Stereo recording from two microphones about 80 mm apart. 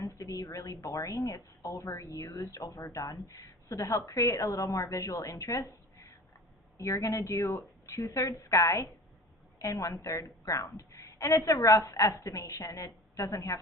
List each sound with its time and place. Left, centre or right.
0.0 s speech: left